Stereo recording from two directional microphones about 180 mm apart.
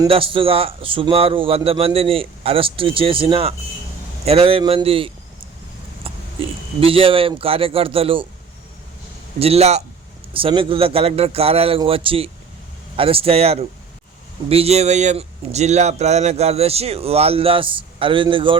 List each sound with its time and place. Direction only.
0.1 s speech: 30° right (ahead or behind)
6.7 s speech: 30° right (ahead or behind)
9.4 s speech: 35° right (ahead or behind)